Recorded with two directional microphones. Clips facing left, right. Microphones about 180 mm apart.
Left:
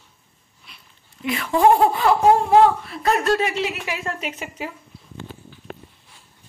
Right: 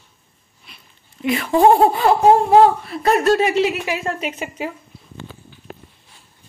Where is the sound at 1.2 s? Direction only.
30° right (ahead or behind).